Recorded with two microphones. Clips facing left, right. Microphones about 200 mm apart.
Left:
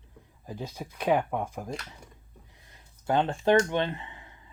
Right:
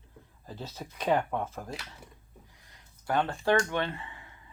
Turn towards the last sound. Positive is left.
turn(degrees=20)  # may be behind; listen again after turning